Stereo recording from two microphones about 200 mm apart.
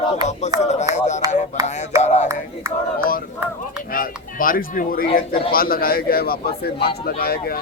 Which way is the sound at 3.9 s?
45° left (ahead or behind).